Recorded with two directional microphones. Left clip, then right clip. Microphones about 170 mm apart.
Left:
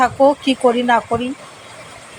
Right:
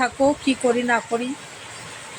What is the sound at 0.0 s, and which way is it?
Speech, 15° left (ahead or behind).